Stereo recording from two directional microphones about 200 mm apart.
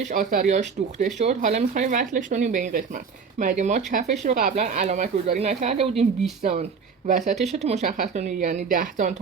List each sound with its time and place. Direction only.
0.0 s speech: 40° right (ahead or behind)